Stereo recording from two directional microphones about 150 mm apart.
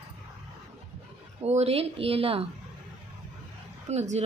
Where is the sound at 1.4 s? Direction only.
45° right (ahead or behind).